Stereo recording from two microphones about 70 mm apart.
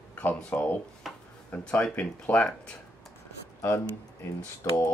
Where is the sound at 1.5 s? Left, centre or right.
Centre.